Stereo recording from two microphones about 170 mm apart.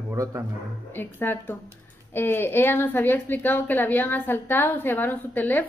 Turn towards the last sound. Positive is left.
turn(degrees=10)  # may be behind; listen again after turning